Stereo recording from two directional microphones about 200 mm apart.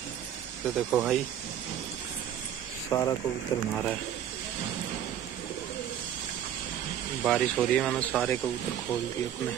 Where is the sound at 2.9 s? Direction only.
15° left (ahead or behind).